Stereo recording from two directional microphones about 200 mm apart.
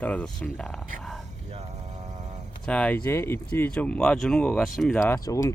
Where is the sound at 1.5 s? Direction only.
35° right (ahead or behind).